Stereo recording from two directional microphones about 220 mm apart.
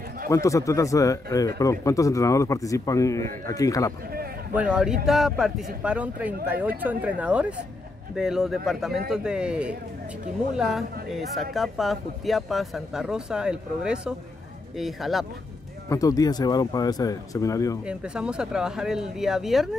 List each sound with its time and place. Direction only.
0.3 s speech: 15° left (ahead or behind)
4.6 s speech: 5° right (ahead or behind)
15.9 s speech: 15° left (ahead or behind)
17.8 s speech: 5° right (ahead or behind)